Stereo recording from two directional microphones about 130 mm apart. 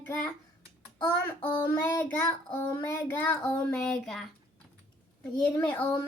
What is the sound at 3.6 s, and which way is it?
Speech, 5° left (ahead or behind).